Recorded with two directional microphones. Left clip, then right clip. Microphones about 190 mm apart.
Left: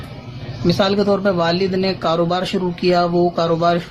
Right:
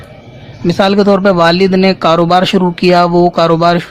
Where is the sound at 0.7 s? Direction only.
50° right (ahead or behind).